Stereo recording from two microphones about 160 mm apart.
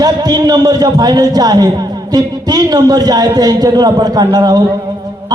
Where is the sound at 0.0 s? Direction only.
25° right (ahead or behind).